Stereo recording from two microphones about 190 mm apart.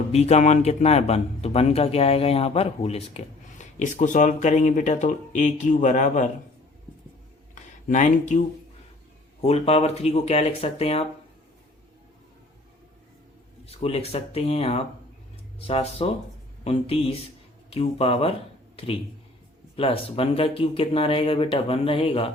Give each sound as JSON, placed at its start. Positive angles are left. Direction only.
{"t": 0.1, "sound": "a man's voice", "side_deg": 35}
{"t": 7.5, "sound": "a man's voice", "side_deg": 40}
{"t": 13.7, "sound": "a man's voice", "side_deg": 30}
{"t": 19.7, "sound": "speech", "side_deg": 30}